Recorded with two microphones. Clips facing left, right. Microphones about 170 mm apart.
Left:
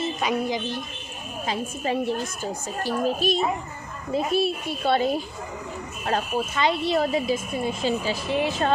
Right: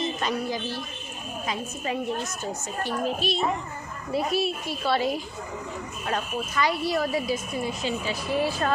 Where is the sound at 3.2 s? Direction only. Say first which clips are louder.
Left 4 dB; 45° left (ahead or behind).